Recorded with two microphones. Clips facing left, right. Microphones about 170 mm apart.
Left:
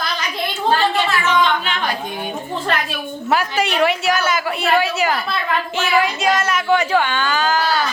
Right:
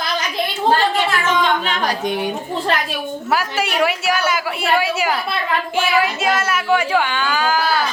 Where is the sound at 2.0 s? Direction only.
80° right.